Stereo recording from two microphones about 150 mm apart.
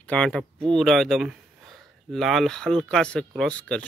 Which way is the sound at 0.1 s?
5° left (ahead or behind).